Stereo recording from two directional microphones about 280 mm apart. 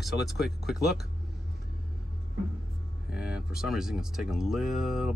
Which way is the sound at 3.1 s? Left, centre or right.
Centre.